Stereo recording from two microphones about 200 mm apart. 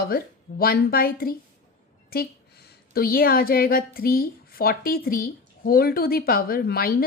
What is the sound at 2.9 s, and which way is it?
A woman's voice, 50° left (ahead or behind).